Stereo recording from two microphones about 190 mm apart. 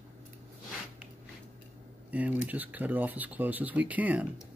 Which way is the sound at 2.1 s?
10° right (ahead or behind).